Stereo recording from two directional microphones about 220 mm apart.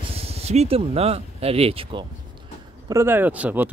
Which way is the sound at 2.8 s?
10° right (ahead or behind).